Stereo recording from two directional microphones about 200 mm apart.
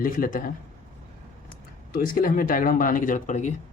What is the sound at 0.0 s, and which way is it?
Speech, 45° left (ahead or behind).